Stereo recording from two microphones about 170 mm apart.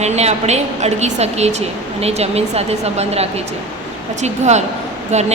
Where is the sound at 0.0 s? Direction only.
40° right (ahead or behind).